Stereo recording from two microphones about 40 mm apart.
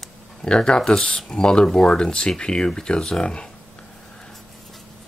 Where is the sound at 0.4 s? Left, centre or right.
Left.